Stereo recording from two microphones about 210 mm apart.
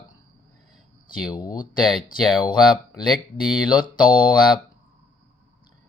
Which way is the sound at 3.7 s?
20° left (ahead or behind).